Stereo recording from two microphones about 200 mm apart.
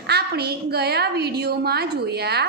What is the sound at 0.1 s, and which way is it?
A woman's voice, 55° right (ahead or behind).